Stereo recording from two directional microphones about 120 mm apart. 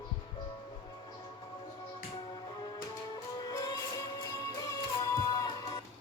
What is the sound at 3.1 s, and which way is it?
Music, 30° left (ahead or behind).